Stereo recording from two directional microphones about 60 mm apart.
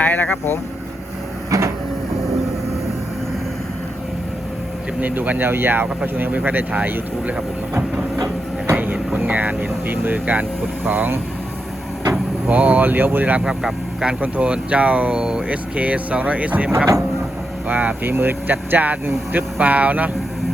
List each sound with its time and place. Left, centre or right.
0.0 s speech: left
1.5 s a sound: right
4.9 s speech: right
12.5 s speech: right
13.4 s speech: centre
14.0 s speech: right
15.4 s speech: right
16.7 s speech: right
17.7 s speech: right